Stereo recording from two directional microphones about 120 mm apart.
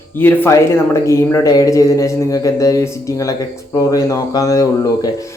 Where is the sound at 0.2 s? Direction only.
20° left (ahead or behind).